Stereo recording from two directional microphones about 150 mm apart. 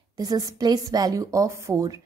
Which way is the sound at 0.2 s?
25° right (ahead or behind).